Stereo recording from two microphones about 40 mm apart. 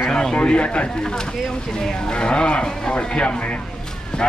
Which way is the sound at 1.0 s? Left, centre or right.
Centre.